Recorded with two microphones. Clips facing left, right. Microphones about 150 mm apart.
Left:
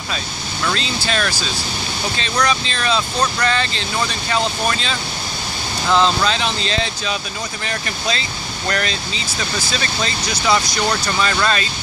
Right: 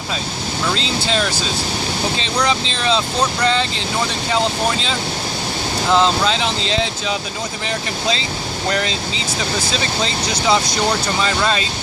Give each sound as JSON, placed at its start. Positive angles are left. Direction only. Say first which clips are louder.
{"t": 0.6, "sound": "speech", "louder": "right 1 dB", "side_deg": -20}